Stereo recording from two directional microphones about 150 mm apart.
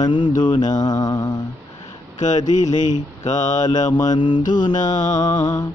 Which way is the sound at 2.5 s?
50° left (ahead or behind).